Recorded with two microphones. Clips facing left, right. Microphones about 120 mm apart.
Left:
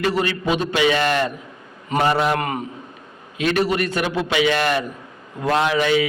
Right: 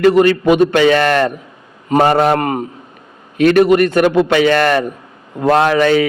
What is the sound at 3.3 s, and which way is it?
A man's voice, 55° right (ahead or behind).